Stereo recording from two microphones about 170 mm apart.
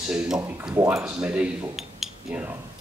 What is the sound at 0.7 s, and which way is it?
Speech, 15° right (ahead or behind).